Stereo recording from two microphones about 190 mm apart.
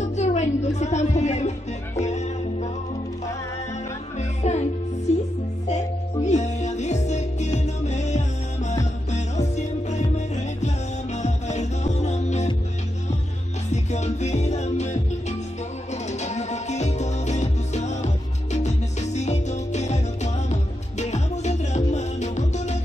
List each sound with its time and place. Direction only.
0.1 s music: 35° left (ahead or behind)
4.2 s music: 35° left (ahead or behind)
13.7 s music: 35° left (ahead or behind)